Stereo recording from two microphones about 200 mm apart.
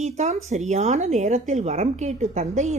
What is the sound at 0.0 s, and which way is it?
A woman's voice, 35° right (ahead or behind).